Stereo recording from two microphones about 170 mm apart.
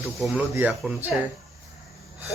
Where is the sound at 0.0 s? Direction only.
Centre (ahead or behind).